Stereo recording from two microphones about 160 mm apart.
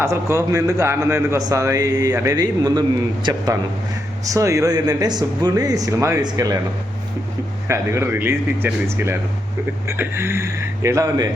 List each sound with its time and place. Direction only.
0.0 s speech: 15° right (ahead or behind)
7.7 s speech: 15° right (ahead or behind)